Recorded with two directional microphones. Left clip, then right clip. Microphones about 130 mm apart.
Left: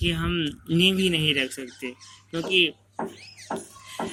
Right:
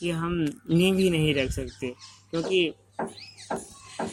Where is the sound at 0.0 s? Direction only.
35° right (ahead or behind).